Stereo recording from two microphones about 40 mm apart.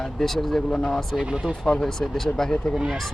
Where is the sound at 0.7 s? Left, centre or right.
Centre.